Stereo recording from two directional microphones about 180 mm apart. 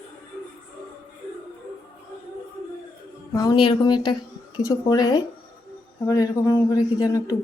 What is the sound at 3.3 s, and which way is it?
A man's voice, 25° left (ahead or behind).